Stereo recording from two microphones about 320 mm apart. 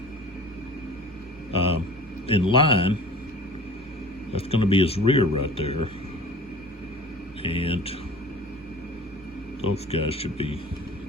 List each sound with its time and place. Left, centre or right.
1.5 s speech: centre
4.4 s speech: centre
7.4 s speech: centre
9.7 s speech: centre